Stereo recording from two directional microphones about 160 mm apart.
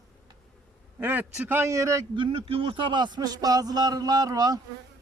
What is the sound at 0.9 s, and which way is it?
A man's voice, 10° right (ahead or behind).